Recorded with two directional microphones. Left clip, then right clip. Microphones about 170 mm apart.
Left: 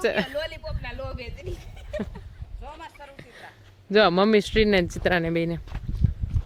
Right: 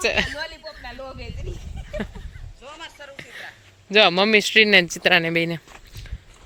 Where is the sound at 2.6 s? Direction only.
70° left (ahead or behind).